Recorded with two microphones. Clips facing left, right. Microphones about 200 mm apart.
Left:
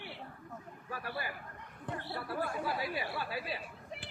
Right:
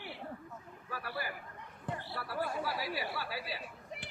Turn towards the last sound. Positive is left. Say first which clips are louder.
# left 2 dB
turn(degrees=20)  # may be behind; listen again after turning